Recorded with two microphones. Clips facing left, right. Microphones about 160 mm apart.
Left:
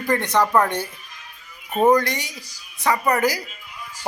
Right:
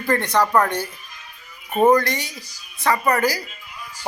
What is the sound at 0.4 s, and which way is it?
Speech, 5° left (ahead or behind).